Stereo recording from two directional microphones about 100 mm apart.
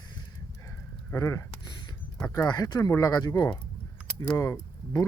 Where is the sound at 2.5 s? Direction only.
45° left (ahead or behind).